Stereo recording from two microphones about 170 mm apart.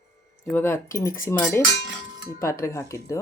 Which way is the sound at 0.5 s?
15° left (ahead or behind).